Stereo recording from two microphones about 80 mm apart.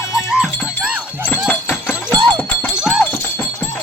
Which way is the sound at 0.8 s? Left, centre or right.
Centre.